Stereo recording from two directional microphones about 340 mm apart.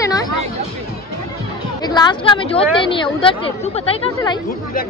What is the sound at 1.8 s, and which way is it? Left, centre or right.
Speech, centre.